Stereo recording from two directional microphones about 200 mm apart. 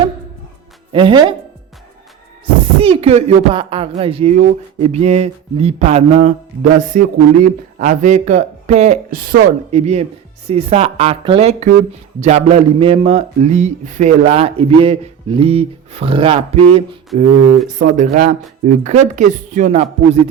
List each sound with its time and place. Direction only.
0.9 s speech: 25° right (ahead or behind)
2.8 s speech: 30° right (ahead or behind)
17.1 s speech: 40° right (ahead or behind)